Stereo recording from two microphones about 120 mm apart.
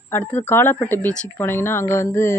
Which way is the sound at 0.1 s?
15° left (ahead or behind).